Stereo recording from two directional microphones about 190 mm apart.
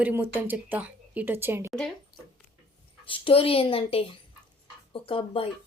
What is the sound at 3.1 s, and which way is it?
Speech, 30° left (ahead or behind).